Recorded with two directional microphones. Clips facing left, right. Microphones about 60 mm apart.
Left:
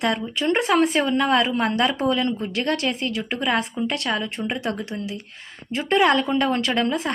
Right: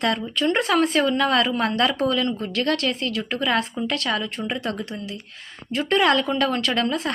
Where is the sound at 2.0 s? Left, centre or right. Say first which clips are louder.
Even; left.